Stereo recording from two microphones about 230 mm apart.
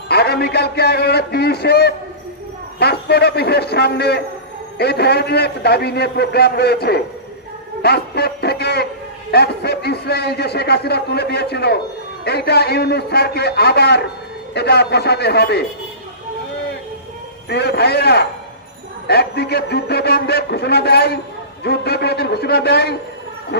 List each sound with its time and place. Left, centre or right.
0.1 s a man's voice: left
17.5 s a man's voice: left